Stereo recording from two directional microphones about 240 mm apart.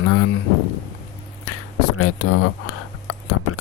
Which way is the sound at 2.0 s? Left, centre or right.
Left.